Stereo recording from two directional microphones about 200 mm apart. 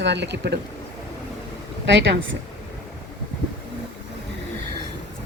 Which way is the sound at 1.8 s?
60° right (ahead or behind).